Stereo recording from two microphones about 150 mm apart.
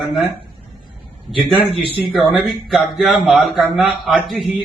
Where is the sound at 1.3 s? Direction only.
Centre (ahead or behind).